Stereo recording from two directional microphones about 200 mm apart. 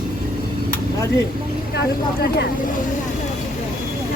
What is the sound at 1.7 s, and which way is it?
Speech, 55° left (ahead or behind).